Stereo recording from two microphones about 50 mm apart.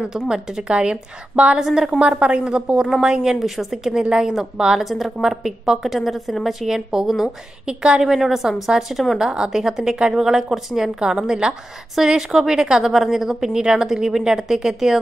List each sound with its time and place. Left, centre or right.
0.3 s a woman's voice: centre
3.3 s a woman's voice: centre
8.1 s a woman's voice: centre